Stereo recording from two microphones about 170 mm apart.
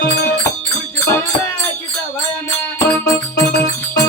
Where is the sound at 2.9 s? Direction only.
15° left (ahead or behind).